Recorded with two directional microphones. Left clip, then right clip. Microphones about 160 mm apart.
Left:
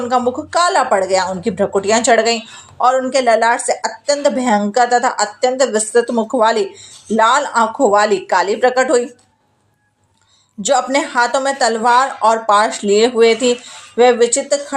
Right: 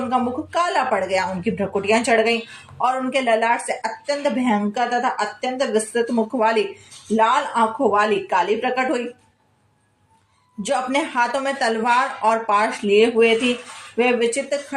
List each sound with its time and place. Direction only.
0.1 s a woman's voice: 20° left (ahead or behind)
10.6 s a woman's voice: 25° left (ahead or behind)